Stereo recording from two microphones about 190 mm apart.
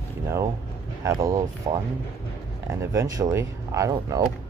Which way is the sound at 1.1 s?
15° right (ahead or behind).